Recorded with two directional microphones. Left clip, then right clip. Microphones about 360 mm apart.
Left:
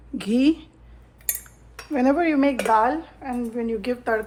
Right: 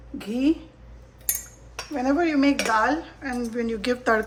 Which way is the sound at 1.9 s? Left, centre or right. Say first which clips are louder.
Left 3 dB; left.